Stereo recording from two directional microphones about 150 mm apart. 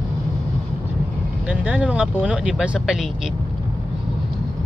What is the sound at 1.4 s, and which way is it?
Speech, 5° right (ahead or behind).